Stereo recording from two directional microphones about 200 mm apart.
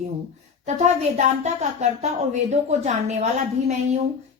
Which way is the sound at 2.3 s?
35° right (ahead or behind).